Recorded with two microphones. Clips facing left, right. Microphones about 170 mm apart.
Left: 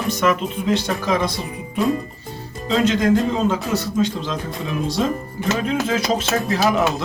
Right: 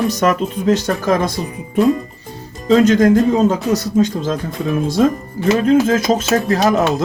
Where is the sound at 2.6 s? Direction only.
45° right (ahead or behind).